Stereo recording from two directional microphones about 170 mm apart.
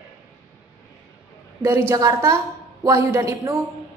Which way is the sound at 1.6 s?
15° right (ahead or behind).